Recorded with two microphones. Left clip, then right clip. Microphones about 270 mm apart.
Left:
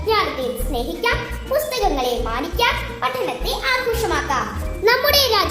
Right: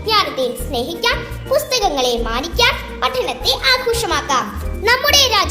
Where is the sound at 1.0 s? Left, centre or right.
Right.